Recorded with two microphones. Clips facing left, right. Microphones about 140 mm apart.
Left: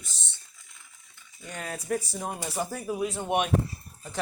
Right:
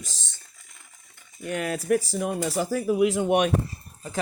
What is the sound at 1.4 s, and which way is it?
Speech, 70° right (ahead or behind).